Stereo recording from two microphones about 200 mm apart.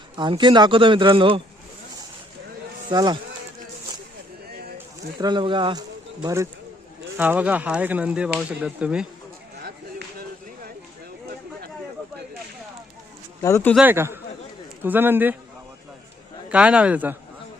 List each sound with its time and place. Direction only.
0.2 s speech: 25° right (ahead or behind)
2.9 s speech: 20° right (ahead or behind)
5.2 s speech: 25° right (ahead or behind); by 9.0 s 5° right (ahead or behind)
13.4 s speech: 10° left (ahead or behind)
13.7 s speech: 10° right (ahead or behind)
16.5 s a man's voice: 5° right (ahead or behind)